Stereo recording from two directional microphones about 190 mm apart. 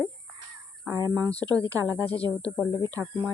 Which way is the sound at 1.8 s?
20° right (ahead or behind).